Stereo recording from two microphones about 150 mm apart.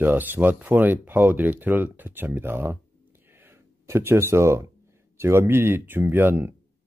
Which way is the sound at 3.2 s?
15° right (ahead or behind).